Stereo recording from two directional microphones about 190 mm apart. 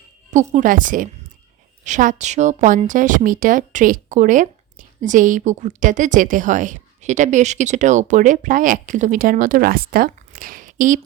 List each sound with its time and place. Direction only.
0.5 s a woman's voice: 45° right (ahead or behind)